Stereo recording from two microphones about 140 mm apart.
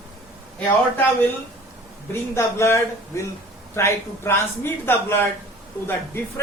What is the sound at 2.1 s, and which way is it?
A man's voice, 20° left (ahead or behind).